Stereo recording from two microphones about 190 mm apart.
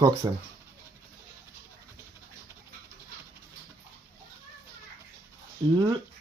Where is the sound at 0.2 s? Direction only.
20° right (ahead or behind).